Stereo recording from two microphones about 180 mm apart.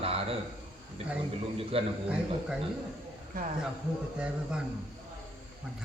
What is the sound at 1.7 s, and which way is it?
Speech, 30° right (ahead or behind).